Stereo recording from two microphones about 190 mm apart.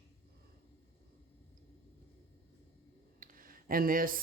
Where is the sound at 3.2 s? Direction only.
45° right (ahead or behind).